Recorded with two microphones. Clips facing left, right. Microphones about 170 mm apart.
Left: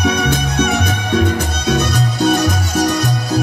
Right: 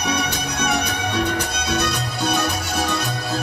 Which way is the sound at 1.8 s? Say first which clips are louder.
Left 6 dB; 45° left (ahead or behind).